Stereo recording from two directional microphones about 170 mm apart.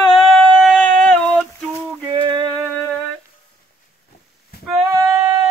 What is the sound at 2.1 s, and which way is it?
Music, 30° right (ahead or behind).